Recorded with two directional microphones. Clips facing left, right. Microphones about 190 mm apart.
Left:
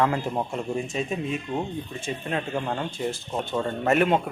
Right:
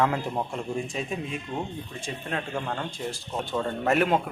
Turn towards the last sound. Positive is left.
turn(degrees=0)  # may be behind; listen again after turning